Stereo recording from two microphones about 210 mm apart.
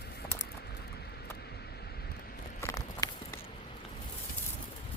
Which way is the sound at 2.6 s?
15° left (ahead or behind).